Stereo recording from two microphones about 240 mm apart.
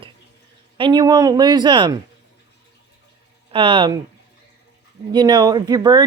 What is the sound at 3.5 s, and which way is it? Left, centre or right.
Speech, right.